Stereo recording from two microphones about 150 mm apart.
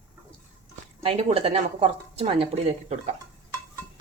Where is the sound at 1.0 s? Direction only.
40° right (ahead or behind).